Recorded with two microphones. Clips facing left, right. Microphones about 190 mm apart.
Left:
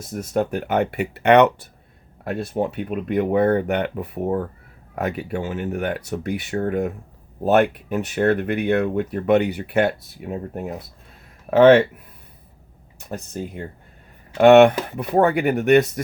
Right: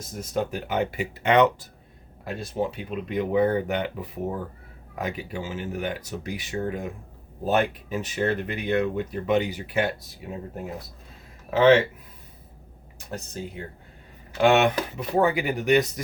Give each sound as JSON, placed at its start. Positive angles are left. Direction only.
{"t": 0.1, "sound": "speech", "side_deg": 60}
{"t": 11.5, "sound": "speech", "side_deg": 60}
{"t": 14.3, "sound": "speech", "side_deg": 60}